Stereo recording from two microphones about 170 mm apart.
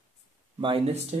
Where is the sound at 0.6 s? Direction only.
35° right (ahead or behind).